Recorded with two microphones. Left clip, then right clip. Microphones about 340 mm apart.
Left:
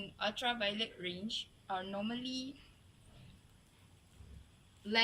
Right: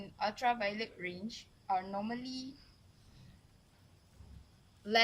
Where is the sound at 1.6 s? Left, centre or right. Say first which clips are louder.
Right 7 dB; right.